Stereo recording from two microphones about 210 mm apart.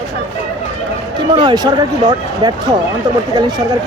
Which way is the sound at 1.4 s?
20° right (ahead or behind).